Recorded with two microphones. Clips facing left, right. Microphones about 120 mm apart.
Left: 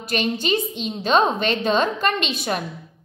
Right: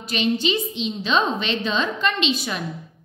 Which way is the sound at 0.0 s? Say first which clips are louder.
Right 1 dB; 50° left (ahead or behind).